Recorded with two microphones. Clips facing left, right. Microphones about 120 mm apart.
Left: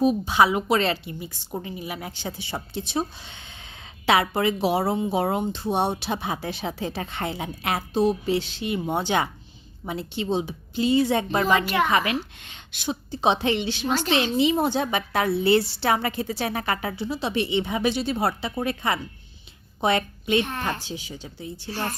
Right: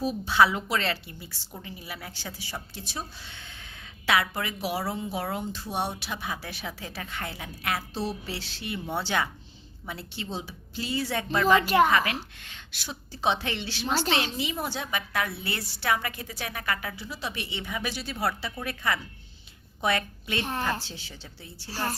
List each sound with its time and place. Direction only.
0.0 s a woman's voice: 15° left (ahead or behind)
11.6 s a woman's voice: 40° right (ahead or behind)
11.9 s a woman's voice: 20° left (ahead or behind)
20.4 s a woman's voice: 35° right (ahead or behind)
20.8 s speech: 15° left (ahead or behind)